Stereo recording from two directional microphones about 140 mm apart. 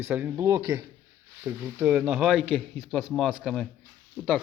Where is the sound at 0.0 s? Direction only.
15° right (ahead or behind).